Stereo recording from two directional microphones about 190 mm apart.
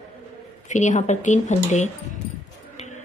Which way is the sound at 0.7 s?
40° left (ahead or behind).